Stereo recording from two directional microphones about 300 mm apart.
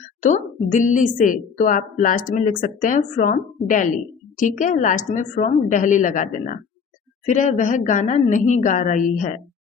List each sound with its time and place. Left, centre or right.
0.2 s a woman's voice: left